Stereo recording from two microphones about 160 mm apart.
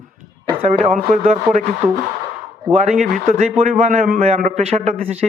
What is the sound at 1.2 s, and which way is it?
Speech, 50° right (ahead or behind).